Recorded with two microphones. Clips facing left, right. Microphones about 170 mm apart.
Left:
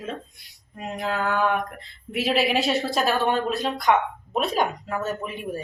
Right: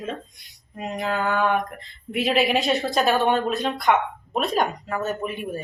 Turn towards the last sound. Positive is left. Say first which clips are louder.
# right 2 dB
turn(degrees=0)  # may be behind; listen again after turning